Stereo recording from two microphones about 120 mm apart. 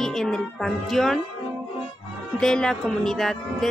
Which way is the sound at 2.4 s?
5° left (ahead or behind).